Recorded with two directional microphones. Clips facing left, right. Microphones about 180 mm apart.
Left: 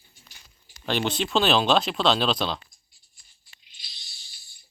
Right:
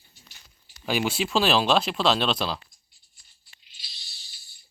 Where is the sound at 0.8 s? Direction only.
5° right (ahead or behind).